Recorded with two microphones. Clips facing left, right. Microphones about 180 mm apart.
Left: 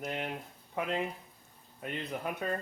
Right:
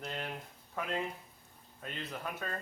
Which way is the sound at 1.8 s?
15° left (ahead or behind).